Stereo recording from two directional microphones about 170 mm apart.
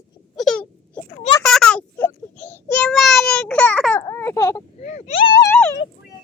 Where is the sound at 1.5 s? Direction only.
5° left (ahead or behind).